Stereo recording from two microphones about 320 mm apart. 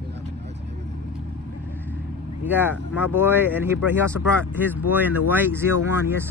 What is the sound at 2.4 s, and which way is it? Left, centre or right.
Speech, centre.